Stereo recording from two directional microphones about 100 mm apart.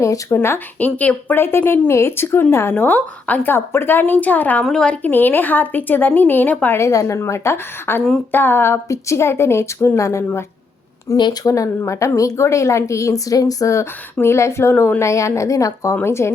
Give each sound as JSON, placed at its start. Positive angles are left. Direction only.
{"t": 0.0, "sound": "speech", "side_deg": 30}
{"t": 6.7, "sound": "a woman's voice", "side_deg": 30}